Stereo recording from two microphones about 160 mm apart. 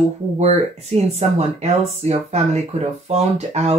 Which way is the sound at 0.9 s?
40° right (ahead or behind).